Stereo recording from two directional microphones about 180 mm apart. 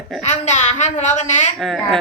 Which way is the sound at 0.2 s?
40° left (ahead or behind).